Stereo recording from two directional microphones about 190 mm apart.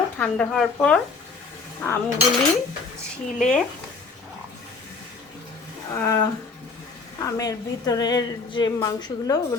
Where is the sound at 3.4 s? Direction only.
Centre (ahead or behind).